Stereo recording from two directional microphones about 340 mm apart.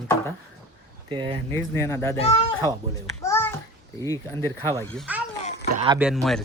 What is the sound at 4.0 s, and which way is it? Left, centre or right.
A child's voice, centre.